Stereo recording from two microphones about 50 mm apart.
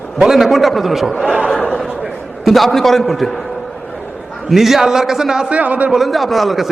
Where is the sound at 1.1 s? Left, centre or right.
Centre.